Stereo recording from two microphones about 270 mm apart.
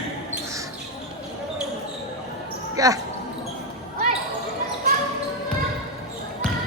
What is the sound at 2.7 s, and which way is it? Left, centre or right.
Speech, centre.